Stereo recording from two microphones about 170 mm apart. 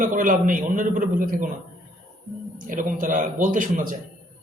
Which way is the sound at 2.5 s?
50° right (ahead or behind).